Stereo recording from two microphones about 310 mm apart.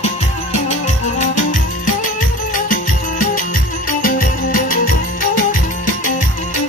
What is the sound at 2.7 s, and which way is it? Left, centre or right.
Music, left.